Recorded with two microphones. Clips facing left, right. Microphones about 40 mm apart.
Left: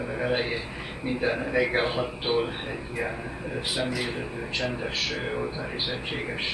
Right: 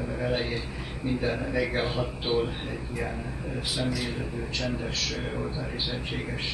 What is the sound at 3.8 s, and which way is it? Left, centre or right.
A man's voice, left.